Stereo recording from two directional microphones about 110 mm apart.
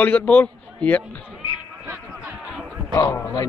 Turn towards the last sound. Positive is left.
turn(degrees=30)  # may be behind; listen again after turning